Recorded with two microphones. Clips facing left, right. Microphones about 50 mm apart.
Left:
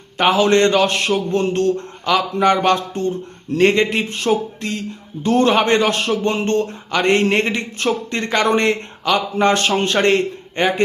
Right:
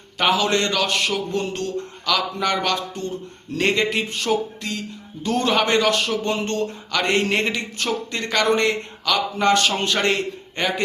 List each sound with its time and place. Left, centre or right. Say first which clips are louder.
0.3 s speech: left 6 dB; left
2.1 s a man's voice: left 7 dB; left